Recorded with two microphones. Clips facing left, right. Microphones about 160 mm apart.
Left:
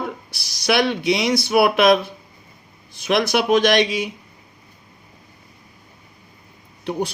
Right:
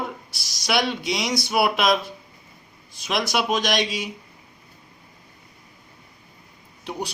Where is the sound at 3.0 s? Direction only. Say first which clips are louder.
Left 5 dB; 55° left (ahead or behind).